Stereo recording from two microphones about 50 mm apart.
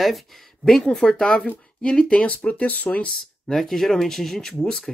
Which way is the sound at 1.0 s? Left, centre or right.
Left.